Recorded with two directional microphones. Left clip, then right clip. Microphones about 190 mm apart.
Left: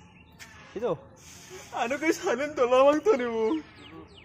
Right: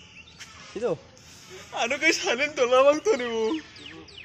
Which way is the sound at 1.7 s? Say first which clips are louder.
Right 4 dB; 40° left (ahead or behind).